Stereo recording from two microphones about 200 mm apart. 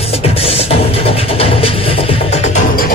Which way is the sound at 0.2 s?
30° left (ahead or behind).